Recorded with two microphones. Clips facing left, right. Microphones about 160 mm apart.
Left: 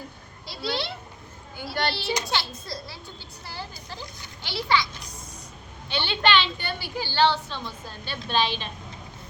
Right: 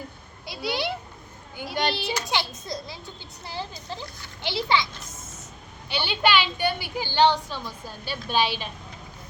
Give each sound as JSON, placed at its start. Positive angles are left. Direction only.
{"t": 0.4, "sound": "a child's voice", "side_deg": -15}
{"t": 5.9, "sound": "a woman's voice", "side_deg": -10}